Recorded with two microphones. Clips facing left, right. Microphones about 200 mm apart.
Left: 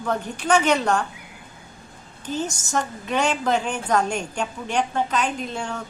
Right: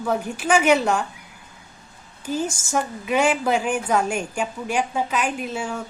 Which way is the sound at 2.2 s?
10° right (ahead or behind).